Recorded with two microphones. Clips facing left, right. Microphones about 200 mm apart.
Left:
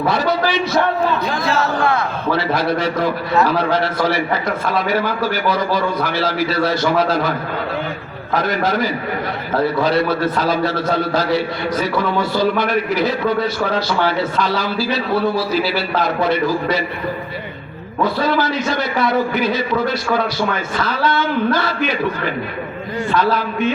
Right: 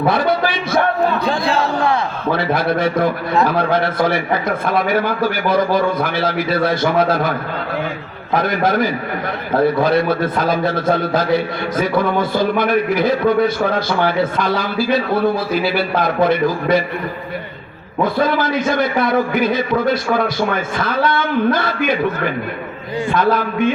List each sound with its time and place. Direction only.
0.1 s a man's voice: 55° right (ahead or behind)
1.2 s speech: 30° right (ahead or behind)
2.3 s a man's voice: 55° right (ahead or behind)
8.4 s a man's voice: 55° right (ahead or behind)
18.0 s a man's voice: 50° right (ahead or behind)